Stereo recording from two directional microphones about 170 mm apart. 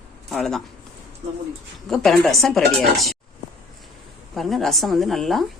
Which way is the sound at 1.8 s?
Centre (ahead or behind).